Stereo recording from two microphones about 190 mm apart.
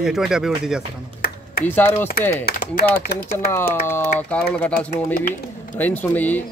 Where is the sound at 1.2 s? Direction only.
50° left (ahead or behind).